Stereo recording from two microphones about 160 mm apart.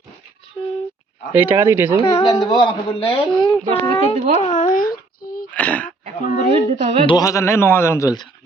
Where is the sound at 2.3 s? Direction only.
30° left (ahead or behind).